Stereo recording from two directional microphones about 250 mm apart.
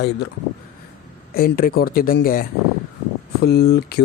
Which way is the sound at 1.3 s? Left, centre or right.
Left.